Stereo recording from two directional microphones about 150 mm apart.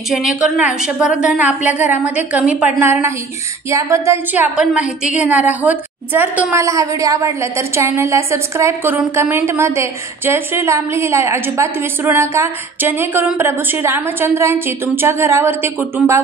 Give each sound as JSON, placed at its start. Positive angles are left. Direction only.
{"t": 0.1, "sound": "a woman's voice", "side_deg": -5}